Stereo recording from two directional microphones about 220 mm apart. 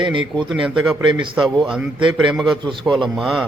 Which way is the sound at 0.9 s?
5° right (ahead or behind).